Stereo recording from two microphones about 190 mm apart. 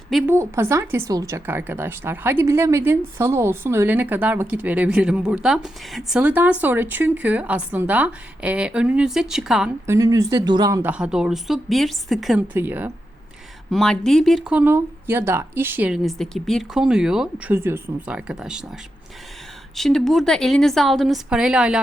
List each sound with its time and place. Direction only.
0.3 s speech: 15° right (ahead or behind)
9.8 s speech: 15° right (ahead or behind)
10.9 s a woman's voice: 5° right (ahead or behind)
13.7 s a woman's voice: centre (ahead or behind)
14.6 s speech: 10° right (ahead or behind)
19.7 s a woman's voice: centre (ahead or behind)